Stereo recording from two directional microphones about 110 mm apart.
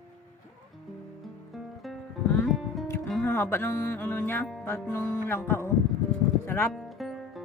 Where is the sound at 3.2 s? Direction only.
20° left (ahead or behind).